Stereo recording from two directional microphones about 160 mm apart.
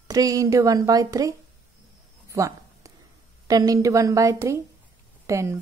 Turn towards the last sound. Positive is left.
turn(degrees=-20)  # may be behind; listen again after turning